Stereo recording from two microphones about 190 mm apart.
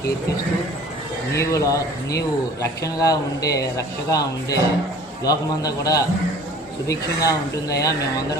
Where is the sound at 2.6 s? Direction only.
15° left (ahead or behind).